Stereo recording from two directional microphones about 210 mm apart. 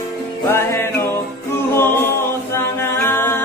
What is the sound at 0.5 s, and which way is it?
Music, 10° left (ahead or behind).